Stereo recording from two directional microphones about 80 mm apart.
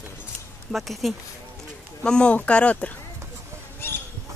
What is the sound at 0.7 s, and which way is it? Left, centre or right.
Speech, centre.